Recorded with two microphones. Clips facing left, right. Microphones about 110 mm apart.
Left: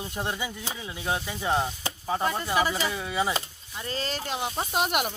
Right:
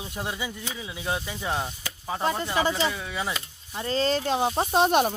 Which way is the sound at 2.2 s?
25° right (ahead or behind).